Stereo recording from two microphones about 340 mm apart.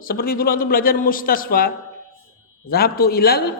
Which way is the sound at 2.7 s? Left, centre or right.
Left.